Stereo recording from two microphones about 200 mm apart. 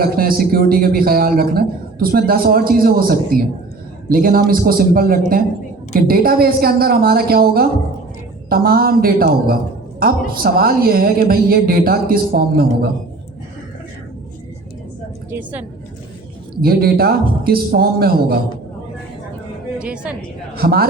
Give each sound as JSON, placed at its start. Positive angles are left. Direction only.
{"t": 0.0, "sound": "a man's voice", "side_deg": -45}
{"t": 15.3, "sound": "a woman's voice", "side_deg": -10}
{"t": 16.6, "sound": "a man's voice", "side_deg": -50}
{"t": 19.8, "sound": "a woman's voice", "side_deg": -5}
{"t": 20.6, "sound": "a man's voice", "side_deg": -50}